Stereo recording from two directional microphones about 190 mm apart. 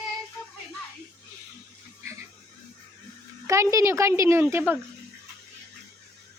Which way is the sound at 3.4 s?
15° right (ahead or behind).